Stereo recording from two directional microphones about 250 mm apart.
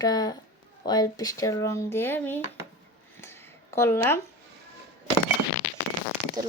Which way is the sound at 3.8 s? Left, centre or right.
Centre.